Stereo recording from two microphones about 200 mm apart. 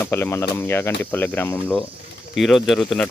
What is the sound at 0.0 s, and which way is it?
Speech, 10° left (ahead or behind).